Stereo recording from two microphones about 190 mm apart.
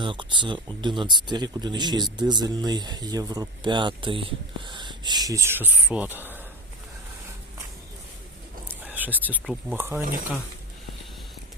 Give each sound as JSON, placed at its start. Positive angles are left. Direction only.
{"t": 0.0, "sound": "speech", "side_deg": -25}
{"t": 8.6, "sound": "speech", "side_deg": -10}